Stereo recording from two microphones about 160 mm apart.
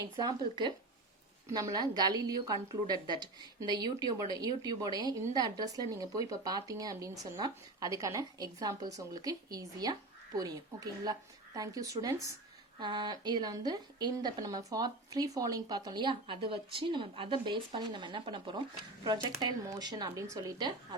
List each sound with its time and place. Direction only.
0.0 s a woman's voice: 25° right (ahead or behind)